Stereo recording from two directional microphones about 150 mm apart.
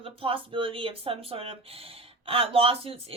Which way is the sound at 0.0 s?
40° right (ahead or behind).